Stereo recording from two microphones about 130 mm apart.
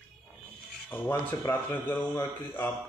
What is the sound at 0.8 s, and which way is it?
Speech, 15° left (ahead or behind).